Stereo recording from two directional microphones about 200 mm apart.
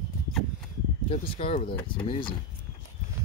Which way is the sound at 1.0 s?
25° left (ahead or behind).